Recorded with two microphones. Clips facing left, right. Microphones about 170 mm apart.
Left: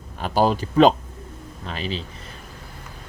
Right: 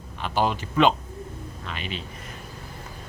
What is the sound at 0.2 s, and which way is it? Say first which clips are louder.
Speech: left 5 dB; 40° left (ahead or behind).